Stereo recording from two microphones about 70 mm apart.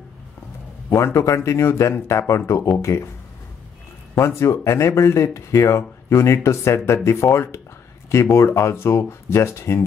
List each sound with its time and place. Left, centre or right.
0.8 s speech: left
4.2 s speech: left